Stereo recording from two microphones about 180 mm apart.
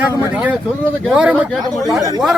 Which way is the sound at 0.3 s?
5° right (ahead or behind).